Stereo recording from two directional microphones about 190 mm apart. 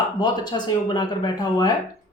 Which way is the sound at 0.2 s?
20° left (ahead or behind).